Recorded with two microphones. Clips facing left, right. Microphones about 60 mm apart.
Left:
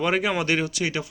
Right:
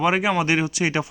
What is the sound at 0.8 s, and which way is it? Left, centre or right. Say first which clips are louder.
Speech: right 4 dB; right.